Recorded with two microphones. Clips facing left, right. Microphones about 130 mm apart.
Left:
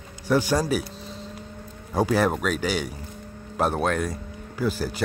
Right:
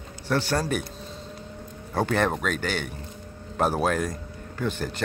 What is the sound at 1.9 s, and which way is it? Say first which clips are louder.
Speech: left 2 dB; 10° left (ahead or behind).